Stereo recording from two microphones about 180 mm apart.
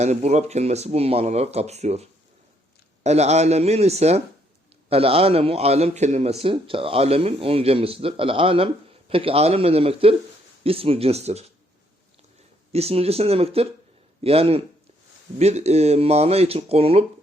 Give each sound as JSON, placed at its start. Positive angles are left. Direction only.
{"t": 0.0, "sound": "a man's voice", "side_deg": -40}
{"t": 12.7, "sound": "a man's voice", "side_deg": -35}